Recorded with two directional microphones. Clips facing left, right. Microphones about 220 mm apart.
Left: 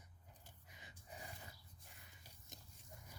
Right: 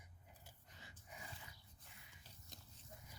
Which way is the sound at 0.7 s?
15° left (ahead or behind).